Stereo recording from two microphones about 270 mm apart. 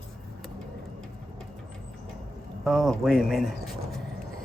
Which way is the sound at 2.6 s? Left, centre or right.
Centre.